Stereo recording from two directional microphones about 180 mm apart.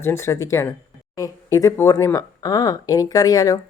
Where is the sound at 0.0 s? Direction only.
15° left (ahead or behind).